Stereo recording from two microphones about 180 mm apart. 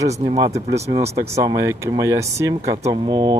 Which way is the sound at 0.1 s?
35° right (ahead or behind).